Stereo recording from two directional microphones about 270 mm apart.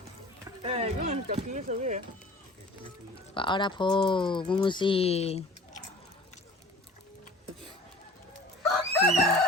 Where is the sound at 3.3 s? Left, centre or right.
Centre.